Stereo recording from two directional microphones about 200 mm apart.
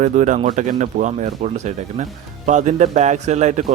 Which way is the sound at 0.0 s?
40° right (ahead or behind).